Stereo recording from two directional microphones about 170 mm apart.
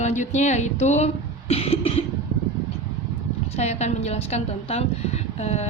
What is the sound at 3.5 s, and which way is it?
A woman's voice, 40° left (ahead or behind).